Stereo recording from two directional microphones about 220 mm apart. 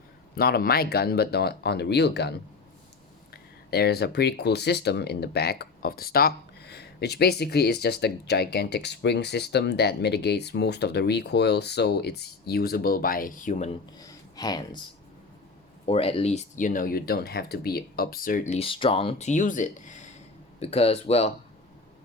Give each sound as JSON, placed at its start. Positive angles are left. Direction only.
{"t": 0.3, "sound": "speech", "side_deg": 45}
{"t": 3.3, "sound": "speech", "side_deg": 45}
{"t": 14.0, "sound": "speech", "side_deg": 15}
{"t": 15.9, "sound": "speech", "side_deg": 25}